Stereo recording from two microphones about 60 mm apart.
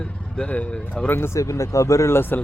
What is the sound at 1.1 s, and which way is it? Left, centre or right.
Speech, left.